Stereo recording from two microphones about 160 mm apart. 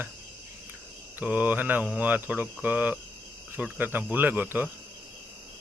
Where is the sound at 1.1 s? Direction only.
10° right (ahead or behind).